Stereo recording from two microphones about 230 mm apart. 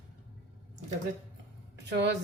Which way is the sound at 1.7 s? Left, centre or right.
Right.